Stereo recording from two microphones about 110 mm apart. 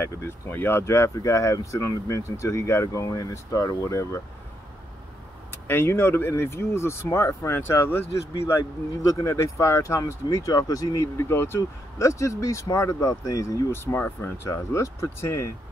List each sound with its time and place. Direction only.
0.0 s speech: 20° left (ahead or behind)
5.5 s speech: 20° left (ahead or behind)
9.0 s speech: 30° left (ahead or behind)